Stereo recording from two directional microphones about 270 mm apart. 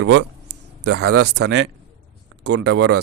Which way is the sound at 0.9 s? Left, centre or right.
Right.